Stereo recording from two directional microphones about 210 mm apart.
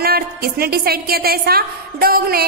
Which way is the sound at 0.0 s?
45° right (ahead or behind).